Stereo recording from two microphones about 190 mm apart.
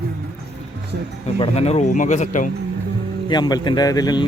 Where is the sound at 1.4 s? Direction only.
35° left (ahead or behind).